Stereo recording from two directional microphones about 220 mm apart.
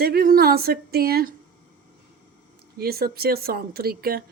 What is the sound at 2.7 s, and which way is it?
Speech, 45° right (ahead or behind).